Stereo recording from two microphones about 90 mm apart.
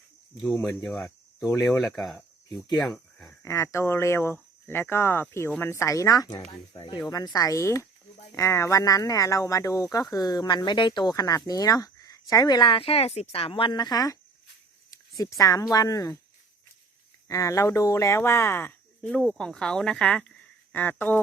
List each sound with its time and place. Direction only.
0.6 s speech: 10° left (ahead or behind)
1.8 s speech: centre (ahead or behind)
3.4 s speech: 30° left (ahead or behind)
6.5 s speech: 65° left (ahead or behind)
7.3 s speech: 40° left (ahead or behind); by 11.1 s 60° left (ahead or behind)
11.1 s speech: 40° left (ahead or behind)
12.7 s speech: 90° left; by 14.2 s 45° left (ahead or behind)
15.2 s speech: 40° left (ahead or behind)
17.2 s speech: 35° left (ahead or behind)
19.3 s speech: 10° left (ahead or behind)